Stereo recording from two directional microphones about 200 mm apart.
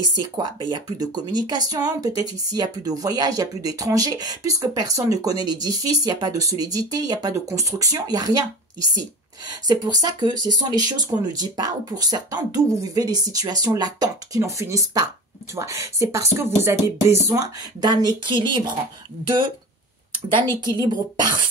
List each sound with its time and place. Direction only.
0.1 s speech: 20° right (ahead or behind)
20.6 s speech: 20° right (ahead or behind)